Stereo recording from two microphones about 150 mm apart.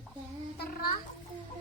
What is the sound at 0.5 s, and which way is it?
Speech, 90° left.